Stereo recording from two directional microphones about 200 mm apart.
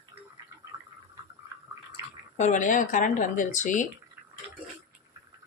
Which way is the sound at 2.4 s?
40° left (ahead or behind).